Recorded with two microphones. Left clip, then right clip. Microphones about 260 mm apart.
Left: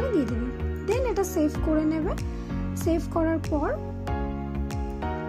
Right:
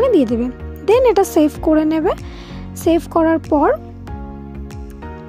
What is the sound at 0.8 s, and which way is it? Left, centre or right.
Speech, right.